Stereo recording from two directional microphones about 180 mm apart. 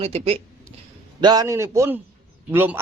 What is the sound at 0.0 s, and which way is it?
Speech, 35° right (ahead or behind).